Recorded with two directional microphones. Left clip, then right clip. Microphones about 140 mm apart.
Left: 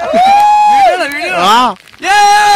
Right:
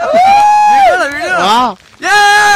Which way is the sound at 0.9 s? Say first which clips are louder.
Right 1 dB; 5° right (ahead or behind).